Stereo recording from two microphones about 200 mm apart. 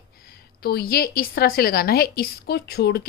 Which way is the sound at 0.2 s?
50° left (ahead or behind).